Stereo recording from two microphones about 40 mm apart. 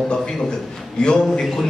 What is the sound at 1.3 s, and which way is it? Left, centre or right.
Speech, centre.